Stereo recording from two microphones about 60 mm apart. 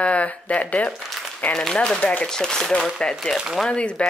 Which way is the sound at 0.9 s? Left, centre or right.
Centre.